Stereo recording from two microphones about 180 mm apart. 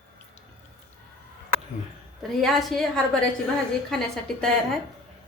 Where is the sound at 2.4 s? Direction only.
Centre (ahead or behind).